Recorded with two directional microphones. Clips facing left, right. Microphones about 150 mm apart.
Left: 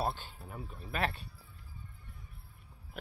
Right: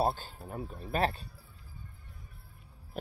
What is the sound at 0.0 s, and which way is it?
Speech, 40° right (ahead or behind).